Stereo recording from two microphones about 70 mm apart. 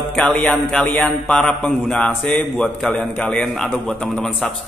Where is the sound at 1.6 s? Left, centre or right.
Centre.